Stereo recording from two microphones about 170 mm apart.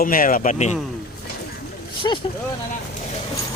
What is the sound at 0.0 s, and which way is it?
Speech, 55° left (ahead or behind).